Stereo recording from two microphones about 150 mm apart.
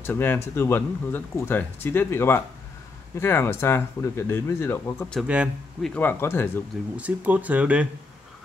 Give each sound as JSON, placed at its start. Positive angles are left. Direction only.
{"t": 0.0, "sound": "speech", "side_deg": 15}
{"t": 5.2, "sound": "speech", "side_deg": -5}
{"t": 5.9, "sound": "speech", "side_deg": 15}
{"t": 7.0, "sound": "speech", "side_deg": -10}